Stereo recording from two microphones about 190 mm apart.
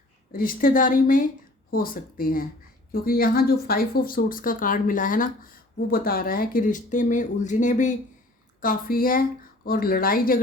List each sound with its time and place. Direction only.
0.3 s speech: 50° left (ahead or behind)